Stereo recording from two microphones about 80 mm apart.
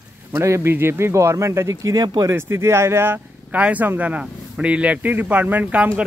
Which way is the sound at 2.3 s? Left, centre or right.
Right.